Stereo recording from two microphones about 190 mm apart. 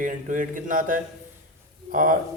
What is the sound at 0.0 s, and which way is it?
A man's voice, 45° right (ahead or behind).